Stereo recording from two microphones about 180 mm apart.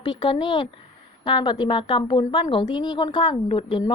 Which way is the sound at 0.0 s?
25° left (ahead or behind).